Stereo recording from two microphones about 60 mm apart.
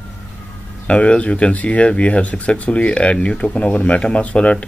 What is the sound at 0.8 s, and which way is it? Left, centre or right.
Speech, left.